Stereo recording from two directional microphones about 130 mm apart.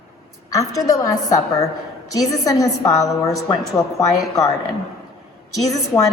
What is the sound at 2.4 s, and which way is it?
A woman's voice, 30° left (ahead or behind).